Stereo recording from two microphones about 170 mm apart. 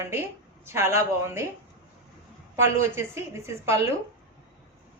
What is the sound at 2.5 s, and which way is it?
Speech, 15° right (ahead or behind).